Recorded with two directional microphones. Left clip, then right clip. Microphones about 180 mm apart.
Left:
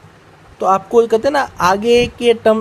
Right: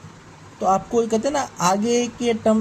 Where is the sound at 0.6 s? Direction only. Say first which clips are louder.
Left 7 dB; 20° left (ahead or behind).